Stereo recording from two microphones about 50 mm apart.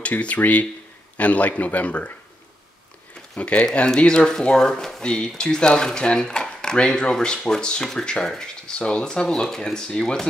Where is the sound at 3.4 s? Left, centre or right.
Left.